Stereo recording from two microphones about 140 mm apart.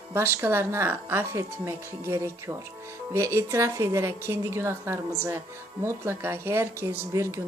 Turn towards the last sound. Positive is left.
turn(degrees=-20)  # may be behind; listen again after turning